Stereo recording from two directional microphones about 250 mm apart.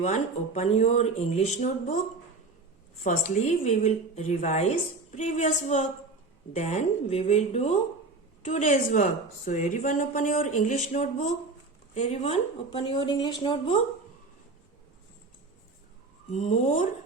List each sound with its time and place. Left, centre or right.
0.0 s speech: left
3.0 s a woman's voice: left
16.3 s speech: left